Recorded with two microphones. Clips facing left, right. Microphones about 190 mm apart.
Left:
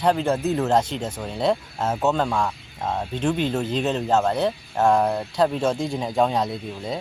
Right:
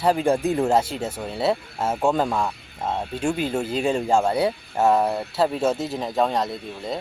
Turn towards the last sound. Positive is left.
turn(degrees=0)  # may be behind; listen again after turning